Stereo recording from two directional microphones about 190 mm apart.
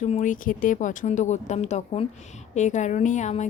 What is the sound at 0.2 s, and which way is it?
Speech, 45° left (ahead or behind).